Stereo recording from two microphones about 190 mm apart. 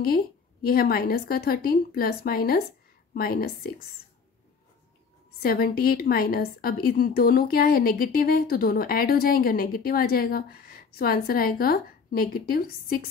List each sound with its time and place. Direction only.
0.0 s a woman's voice: 50° left (ahead or behind)
5.4 s a woman's voice: 50° left (ahead or behind)